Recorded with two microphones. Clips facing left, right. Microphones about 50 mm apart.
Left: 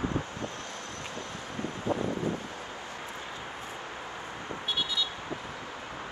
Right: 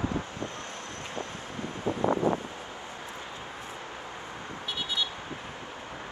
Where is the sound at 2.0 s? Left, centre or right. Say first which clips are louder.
Right 5 dB; right.